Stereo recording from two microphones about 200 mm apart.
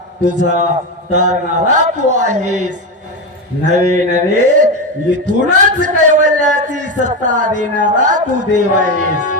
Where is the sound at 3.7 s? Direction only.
35° right (ahead or behind).